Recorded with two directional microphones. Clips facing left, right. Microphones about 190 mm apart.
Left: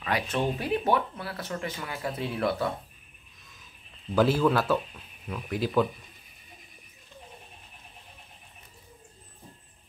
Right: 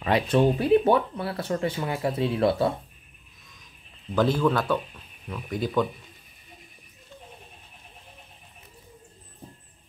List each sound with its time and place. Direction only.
0.0 s speech: 30° right (ahead or behind)
4.1 s a man's voice: 10° left (ahead or behind)